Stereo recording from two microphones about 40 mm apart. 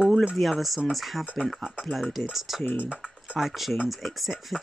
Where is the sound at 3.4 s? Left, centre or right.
Centre.